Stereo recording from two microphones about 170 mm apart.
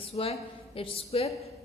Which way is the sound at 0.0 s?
35° left (ahead or behind).